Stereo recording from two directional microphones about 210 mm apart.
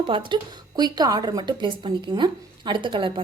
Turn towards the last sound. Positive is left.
turn(degrees=-25)  # may be behind; listen again after turning